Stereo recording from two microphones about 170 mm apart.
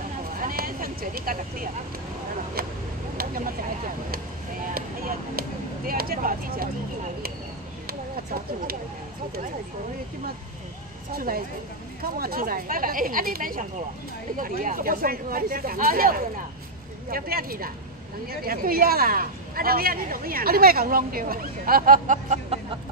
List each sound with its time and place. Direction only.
0.4 s vehicle: 55° right (ahead or behind)
2.6 s speech: 60° right (ahead or behind)
3.2 s vehicle: 55° right (ahead or behind)
4.7 s speech: 60° right (ahead or behind)
7.8 s a sound: 60° right (ahead or behind)
11.1 s speech: 55° right (ahead or behind)